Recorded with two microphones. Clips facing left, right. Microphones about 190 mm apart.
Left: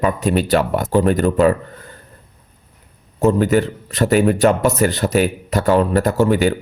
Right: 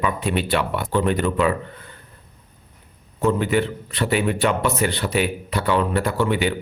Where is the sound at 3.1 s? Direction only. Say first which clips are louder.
Left 5 dB; 40° left (ahead or behind).